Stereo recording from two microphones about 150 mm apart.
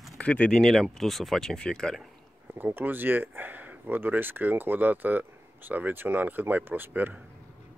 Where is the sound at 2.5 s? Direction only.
15° right (ahead or behind).